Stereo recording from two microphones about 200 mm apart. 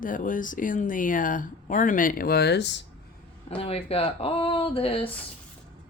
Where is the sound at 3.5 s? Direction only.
30° left (ahead or behind).